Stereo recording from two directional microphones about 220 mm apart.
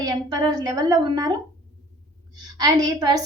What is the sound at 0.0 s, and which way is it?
A woman's voice, 15° right (ahead or behind).